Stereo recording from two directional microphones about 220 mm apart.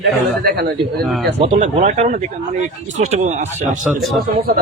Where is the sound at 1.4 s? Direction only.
30° right (ahead or behind).